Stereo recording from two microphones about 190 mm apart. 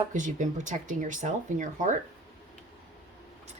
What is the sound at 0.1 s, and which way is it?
Speech, 40° right (ahead or behind).